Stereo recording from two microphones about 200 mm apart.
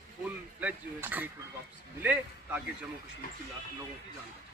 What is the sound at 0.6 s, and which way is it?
Speech, 10° right (ahead or behind).